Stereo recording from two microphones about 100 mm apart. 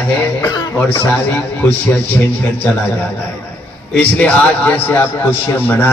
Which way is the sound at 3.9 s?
15° left (ahead or behind).